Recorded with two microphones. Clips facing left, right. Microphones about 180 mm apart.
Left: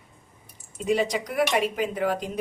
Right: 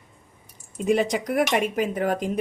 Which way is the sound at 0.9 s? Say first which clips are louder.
Right 3 dB; 50° right (ahead or behind).